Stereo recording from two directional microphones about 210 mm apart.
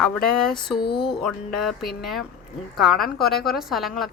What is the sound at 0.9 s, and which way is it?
Speech, 50° left (ahead or behind).